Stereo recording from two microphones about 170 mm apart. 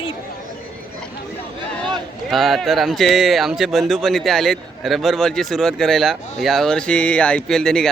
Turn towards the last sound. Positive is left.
turn(degrees=5)  # may be behind; listen again after turning